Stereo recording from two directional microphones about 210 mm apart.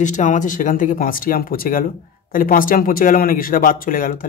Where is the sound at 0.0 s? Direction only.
35° left (ahead or behind).